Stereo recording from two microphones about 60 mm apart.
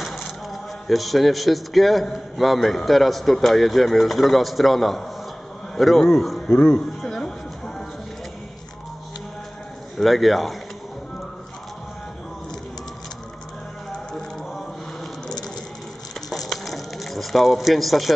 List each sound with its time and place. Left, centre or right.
0.5 s a man's voice: centre
6.5 s speech: left
7.0 s music: centre
9.9 s a man's voice: centre
16.3 s a sound: centre